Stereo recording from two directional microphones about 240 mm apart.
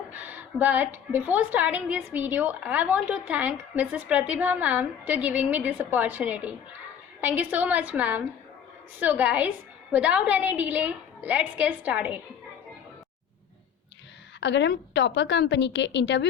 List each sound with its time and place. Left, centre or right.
0.1 s a woman's voice: centre
14.4 s a woman's voice: left